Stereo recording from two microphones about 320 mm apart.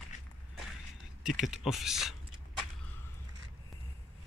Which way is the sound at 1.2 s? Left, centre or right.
Centre.